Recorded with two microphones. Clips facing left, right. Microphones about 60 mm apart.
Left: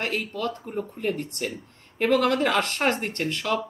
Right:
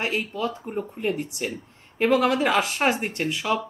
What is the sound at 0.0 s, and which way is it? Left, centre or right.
Speech, centre.